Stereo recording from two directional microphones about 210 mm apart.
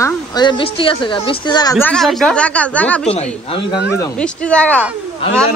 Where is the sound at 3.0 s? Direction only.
30° left (ahead or behind).